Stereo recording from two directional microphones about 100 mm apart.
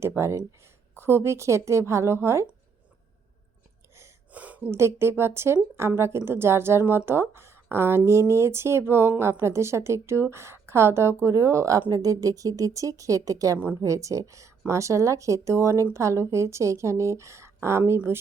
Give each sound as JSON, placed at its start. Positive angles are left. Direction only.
{"t": 0.2, "sound": "a woman's voice", "side_deg": -25}
{"t": 4.3, "sound": "a sound", "side_deg": -15}
{"t": 4.7, "sound": "speech", "side_deg": -25}